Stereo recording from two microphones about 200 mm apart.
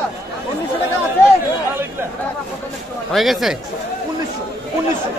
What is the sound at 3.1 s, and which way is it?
Speech, centre (ahead or behind).